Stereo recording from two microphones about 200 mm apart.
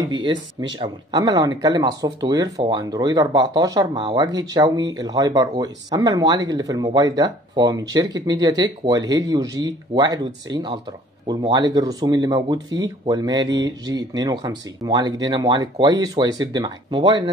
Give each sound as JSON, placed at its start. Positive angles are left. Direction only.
{"t": 0.0, "sound": "speech", "side_deg": -25}